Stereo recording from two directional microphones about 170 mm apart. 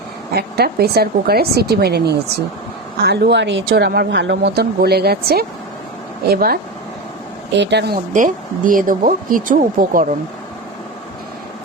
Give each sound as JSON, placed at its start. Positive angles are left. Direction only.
{"t": 0.3, "sound": "speech", "side_deg": -70}
{"t": 3.0, "sound": "speech", "side_deg": -80}
{"t": 7.5, "sound": "speech", "side_deg": -90}
{"t": 8.1, "sound": "speech", "side_deg": -50}